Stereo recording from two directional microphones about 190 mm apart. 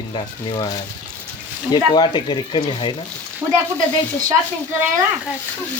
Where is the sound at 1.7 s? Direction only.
20° left (ahead or behind).